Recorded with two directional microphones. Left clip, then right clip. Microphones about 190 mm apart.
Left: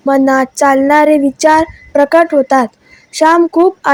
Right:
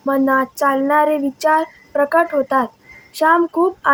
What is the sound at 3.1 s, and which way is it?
Speech, 30° left (ahead or behind).